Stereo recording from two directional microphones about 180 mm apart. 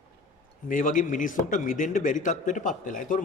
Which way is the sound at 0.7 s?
45° left (ahead or behind).